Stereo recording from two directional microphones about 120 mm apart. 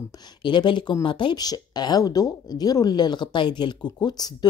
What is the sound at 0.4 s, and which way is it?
Speech, 40° left (ahead or behind).